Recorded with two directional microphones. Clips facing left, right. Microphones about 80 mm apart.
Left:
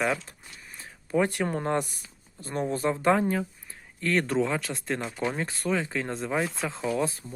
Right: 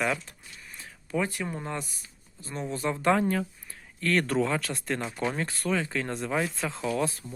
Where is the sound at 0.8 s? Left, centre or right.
Left.